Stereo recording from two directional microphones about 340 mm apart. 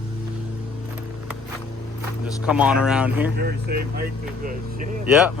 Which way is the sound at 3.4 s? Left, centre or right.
Right.